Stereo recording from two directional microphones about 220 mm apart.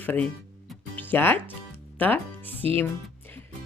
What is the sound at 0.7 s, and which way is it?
Music, 10° left (ahead or behind).